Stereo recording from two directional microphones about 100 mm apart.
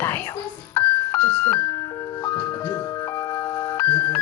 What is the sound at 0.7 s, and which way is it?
Music, 20° left (ahead or behind).